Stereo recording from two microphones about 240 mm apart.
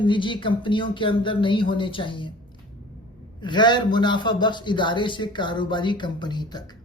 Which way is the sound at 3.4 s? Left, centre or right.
Centre.